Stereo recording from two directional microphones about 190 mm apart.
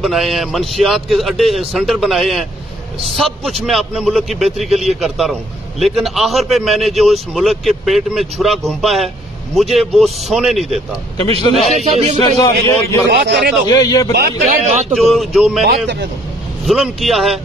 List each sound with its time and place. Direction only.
0.0 s a man's voice: centre (ahead or behind)
11.7 s a man's voice: 35° right (ahead or behind)
12.2 s a man's voice: 20° left (ahead or behind)
13.1 s a man's voice: 60° right (ahead or behind)
13.7 s a man's voice: 20° left (ahead or behind)
14.1 s a man's voice: 55° right (ahead or behind)
14.7 s a man's voice: 35° right (ahead or behind)
15.0 s a man's voice: centre (ahead or behind)
16.6 s a man's voice: centre (ahead or behind)